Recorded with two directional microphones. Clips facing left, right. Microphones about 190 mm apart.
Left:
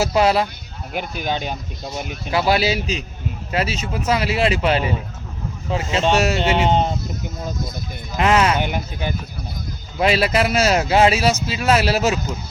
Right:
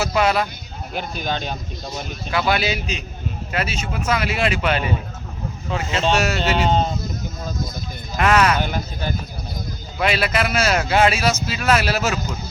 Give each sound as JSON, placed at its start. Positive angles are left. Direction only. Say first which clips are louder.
{"t": 0.0, "sound": "speech", "louder": "left 2 dB", "side_deg": 30}
{"t": 0.9, "sound": "speech", "louder": "left 2 dB", "side_deg": 10}
{"t": 2.5, "sound": "speech", "louder": "left 4 dB", "side_deg": 35}
{"t": 6.0, "sound": "speech", "louder": "left 2 dB", "side_deg": 15}
{"t": 8.1, "sound": "speech", "louder": "even", "side_deg": 25}
{"t": 10.0, "sound": "speech", "louder": "left 3 dB", "side_deg": 35}